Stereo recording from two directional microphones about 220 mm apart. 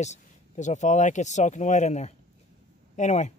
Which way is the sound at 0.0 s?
30° left (ahead or behind).